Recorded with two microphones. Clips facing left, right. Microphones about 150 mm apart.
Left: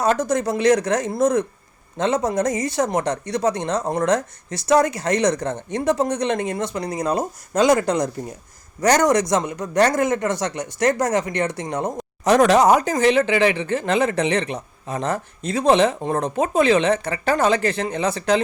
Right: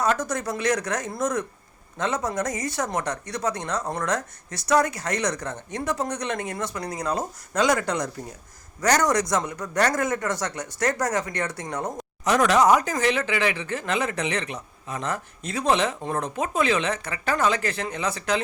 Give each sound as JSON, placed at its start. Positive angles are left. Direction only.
{"t": 0.0, "sound": "speech", "side_deg": 25}
{"t": 12.2, "sound": "speech", "side_deg": 35}